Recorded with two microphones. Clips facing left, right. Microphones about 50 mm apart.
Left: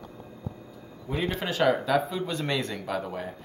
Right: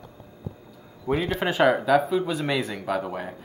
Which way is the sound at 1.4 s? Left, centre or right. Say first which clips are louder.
Right 3 dB; centre.